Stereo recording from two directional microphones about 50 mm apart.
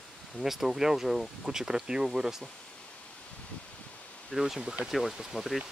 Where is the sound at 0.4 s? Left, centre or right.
Centre.